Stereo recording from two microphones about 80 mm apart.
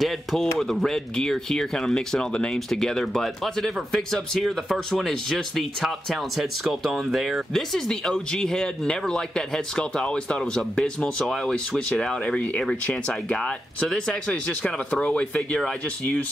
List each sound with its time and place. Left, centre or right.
0.0 s speech: centre